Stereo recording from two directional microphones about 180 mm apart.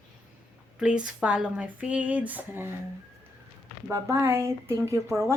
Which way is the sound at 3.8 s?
15° right (ahead or behind).